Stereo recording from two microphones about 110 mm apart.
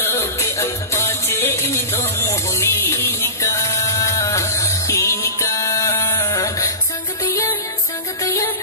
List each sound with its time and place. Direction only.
0.0 s music: 25° left (ahead or behind)
8.2 s music: 30° left (ahead or behind)